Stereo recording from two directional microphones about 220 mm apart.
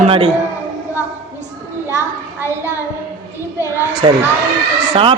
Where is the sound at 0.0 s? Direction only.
25° right (ahead or behind).